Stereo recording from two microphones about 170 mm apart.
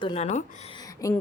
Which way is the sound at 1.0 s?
20° left (ahead or behind).